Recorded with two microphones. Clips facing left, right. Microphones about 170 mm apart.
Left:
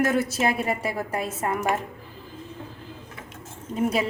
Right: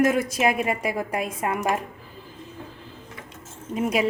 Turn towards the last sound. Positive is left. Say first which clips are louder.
# even
turn(degrees=-10)  # may be behind; listen again after turning